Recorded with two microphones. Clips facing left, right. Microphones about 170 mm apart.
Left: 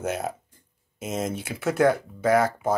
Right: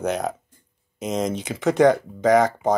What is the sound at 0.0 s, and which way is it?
Speech, 65° right (ahead or behind).